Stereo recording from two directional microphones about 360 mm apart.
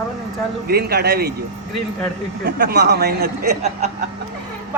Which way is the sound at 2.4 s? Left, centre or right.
Right.